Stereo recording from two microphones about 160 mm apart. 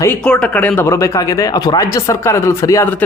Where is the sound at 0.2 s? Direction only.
5° left (ahead or behind).